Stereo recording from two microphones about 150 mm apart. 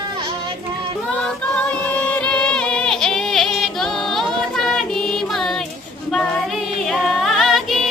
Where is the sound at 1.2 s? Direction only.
10° left (ahead or behind).